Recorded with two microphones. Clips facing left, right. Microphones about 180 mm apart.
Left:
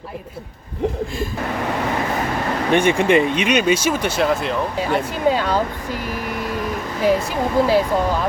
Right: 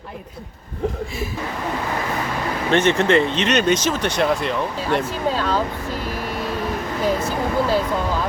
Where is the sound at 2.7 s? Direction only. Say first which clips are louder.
Left 1 dB; 10° left (ahead or behind).